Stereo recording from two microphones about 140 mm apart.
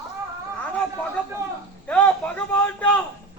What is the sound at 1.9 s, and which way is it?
Speech, 10° left (ahead or behind).